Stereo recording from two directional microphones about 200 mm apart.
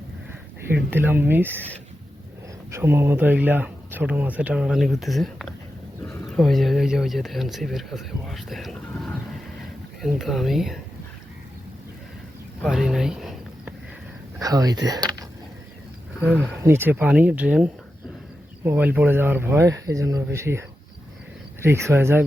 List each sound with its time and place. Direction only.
0.7 s speech: 10° right (ahead or behind)
2.7 s speech: 10° right (ahead or behind)
12.6 s a sound: centre (ahead or behind)
14.3 s speech: 15° right (ahead or behind)
14.8 s a sound: 20° right (ahead or behind)
16.4 s speech: 10° right (ahead or behind)